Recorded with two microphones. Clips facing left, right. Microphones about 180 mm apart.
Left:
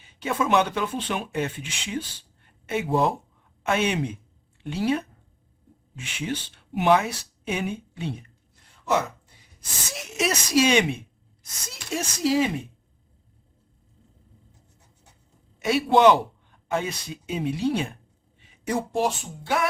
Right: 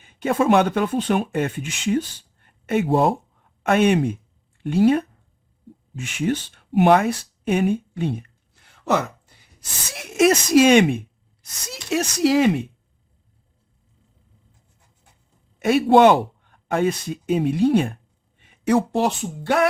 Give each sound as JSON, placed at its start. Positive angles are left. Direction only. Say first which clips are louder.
{"t": 0.0, "sound": "speech", "louder": "right 6 dB", "side_deg": -50}
{"t": 8.6, "sound": "a sound", "louder": "right 3 dB", "side_deg": -70}
{"t": 9.9, "sound": "speech", "louder": "right 10 dB", "side_deg": -55}
{"t": 11.7, "sound": "speech", "louder": "right 7 dB", "side_deg": -70}
{"t": 15.5, "sound": "speech", "louder": "right 5 dB", "side_deg": -55}